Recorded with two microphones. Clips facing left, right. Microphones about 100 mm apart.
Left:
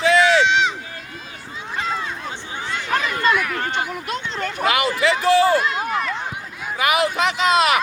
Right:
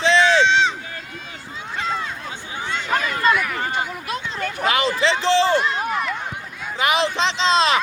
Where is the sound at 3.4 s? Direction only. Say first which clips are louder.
Left 1 dB; centre (ahead or behind).